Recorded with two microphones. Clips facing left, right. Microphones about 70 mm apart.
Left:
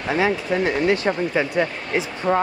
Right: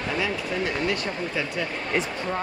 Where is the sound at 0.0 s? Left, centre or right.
Left.